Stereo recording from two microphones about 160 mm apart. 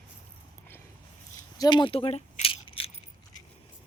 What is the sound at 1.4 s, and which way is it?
Coin, 25° left (ahead or behind).